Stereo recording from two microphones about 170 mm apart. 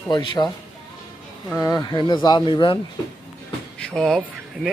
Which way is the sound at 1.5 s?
20° left (ahead or behind).